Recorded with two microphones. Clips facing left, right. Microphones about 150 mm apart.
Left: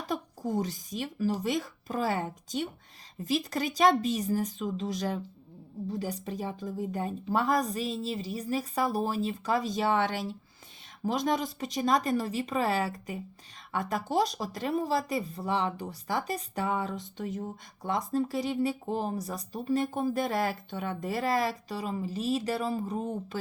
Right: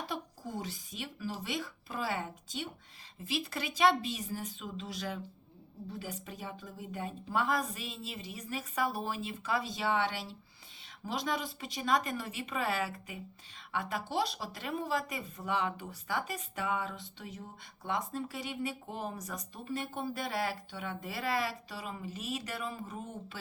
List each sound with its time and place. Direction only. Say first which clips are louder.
0.1 s speech: left 8 dB; 45° left (ahead or behind)